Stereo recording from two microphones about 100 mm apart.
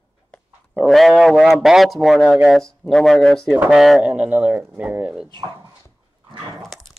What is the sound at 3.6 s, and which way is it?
Speech, 5° right (ahead or behind).